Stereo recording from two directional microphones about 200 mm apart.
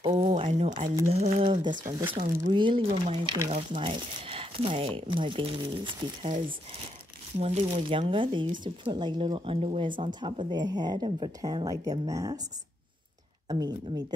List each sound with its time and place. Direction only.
0.1 s speech: 30° right (ahead or behind)
7.3 s speech: 35° right (ahead or behind); by 12.4 s 20° right (ahead or behind)
13.5 s speech: 20° right (ahead or behind)